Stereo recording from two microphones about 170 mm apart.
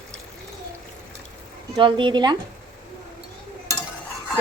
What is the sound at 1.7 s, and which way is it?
Speech, 30° right (ahead or behind).